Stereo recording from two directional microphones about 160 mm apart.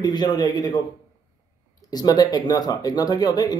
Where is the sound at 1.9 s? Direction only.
25° left (ahead or behind).